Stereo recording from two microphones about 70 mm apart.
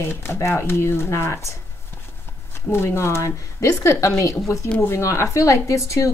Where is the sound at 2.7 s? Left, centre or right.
Left.